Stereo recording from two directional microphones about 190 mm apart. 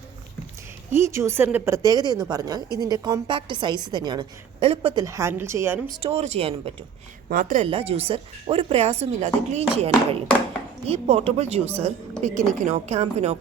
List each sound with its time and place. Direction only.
0.9 s a woman's voice: 15° right (ahead or behind); by 5.0 s 30° right (ahead or behind)
5.0 s a woman's voice: 15° right (ahead or behind)
6.0 s speech: 30° right (ahead or behind)
7.3 s speech: 45° right (ahead or behind)
7.7 s speech: 30° right (ahead or behind)